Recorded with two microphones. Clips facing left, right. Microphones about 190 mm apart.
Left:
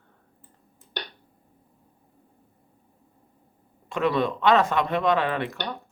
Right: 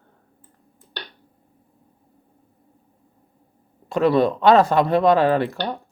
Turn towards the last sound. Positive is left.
turn(degrees=-35)  # may be behind; listen again after turning